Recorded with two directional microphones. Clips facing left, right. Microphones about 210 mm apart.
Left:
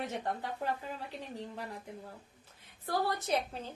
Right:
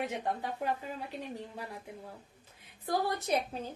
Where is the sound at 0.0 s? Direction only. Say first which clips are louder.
Right 2 dB; 15° right (ahead or behind).